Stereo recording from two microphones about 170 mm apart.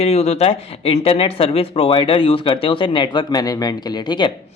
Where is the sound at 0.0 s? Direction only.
40° left (ahead or behind).